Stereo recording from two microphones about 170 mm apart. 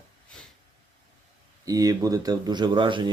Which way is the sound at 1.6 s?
20° right (ahead or behind).